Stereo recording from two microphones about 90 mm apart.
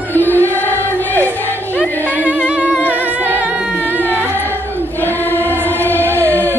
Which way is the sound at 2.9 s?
20° right (ahead or behind).